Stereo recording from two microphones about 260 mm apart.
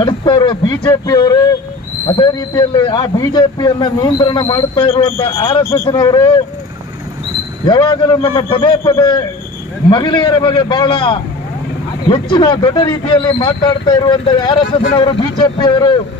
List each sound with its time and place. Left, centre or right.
0.0 s speech: centre
7.6 s speech: centre